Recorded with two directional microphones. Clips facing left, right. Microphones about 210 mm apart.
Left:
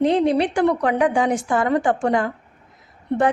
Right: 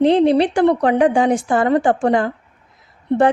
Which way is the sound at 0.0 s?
30° right (ahead or behind).